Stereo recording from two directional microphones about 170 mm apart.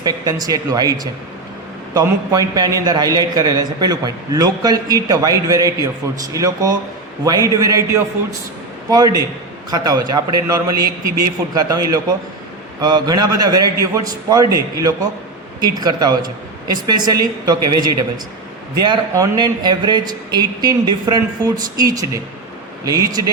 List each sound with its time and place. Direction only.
0.0 s a man's voice: 20° right (ahead or behind)